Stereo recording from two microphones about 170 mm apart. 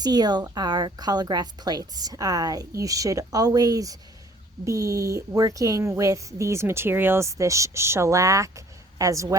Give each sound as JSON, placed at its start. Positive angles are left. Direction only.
{"t": 0.0, "sound": "a woman's voice", "side_deg": -25}